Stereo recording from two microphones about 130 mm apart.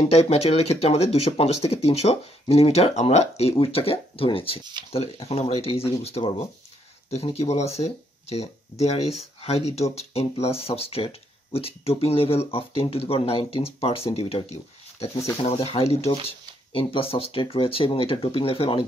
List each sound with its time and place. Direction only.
0.1 s speech: 55° left (ahead or behind)